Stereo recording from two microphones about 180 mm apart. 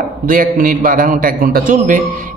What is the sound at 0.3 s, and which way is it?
A man's voice, 50° right (ahead or behind).